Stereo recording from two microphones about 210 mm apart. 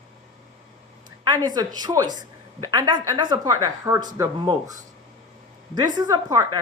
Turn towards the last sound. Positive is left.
turn(degrees=-15)  # may be behind; listen again after turning